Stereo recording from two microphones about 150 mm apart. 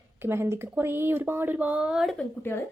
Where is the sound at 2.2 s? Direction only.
15° left (ahead or behind).